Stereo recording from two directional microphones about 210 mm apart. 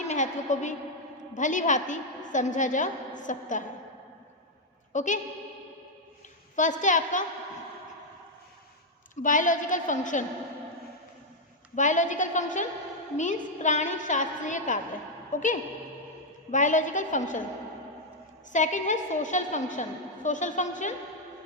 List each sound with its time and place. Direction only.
0.1 s a woman's voice: 35° left (ahead or behind)
4.9 s a woman's voice: 35° left (ahead or behind)
6.6 s a woman's voice: 35° left (ahead or behind)
9.2 s a woman's voice: 40° left (ahead or behind)
11.7 s a woman's voice: 35° left (ahead or behind)
18.5 s a woman's voice: 35° left (ahead or behind)